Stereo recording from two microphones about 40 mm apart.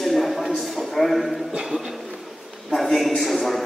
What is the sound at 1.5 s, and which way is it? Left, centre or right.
Music, centre.